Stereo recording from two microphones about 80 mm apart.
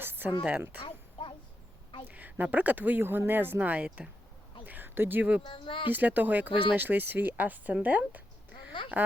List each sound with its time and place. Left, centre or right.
0.0 s a sound: right
0.4 s speech: right
2.0 s speech: right
4.6 s a sound: right
5.5 s speech: left
5.9 s speech: right
6.5 s speech: left
6.7 s speech: right